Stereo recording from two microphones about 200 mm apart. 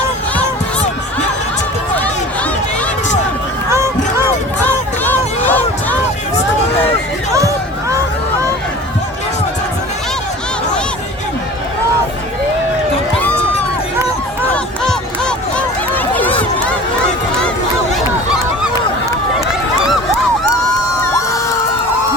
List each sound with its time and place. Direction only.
4.6 s music: 10° left (ahead or behind)
7.3 s a sound: 15° right (ahead or behind)
14.5 s crowd: 5° left (ahead or behind)
16.1 s run: 10° left (ahead or behind)